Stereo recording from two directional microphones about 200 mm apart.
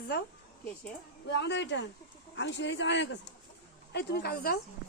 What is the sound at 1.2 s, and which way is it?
Speech, 55° left (ahead or behind).